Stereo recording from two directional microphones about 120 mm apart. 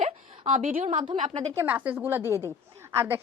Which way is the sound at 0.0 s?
90° right.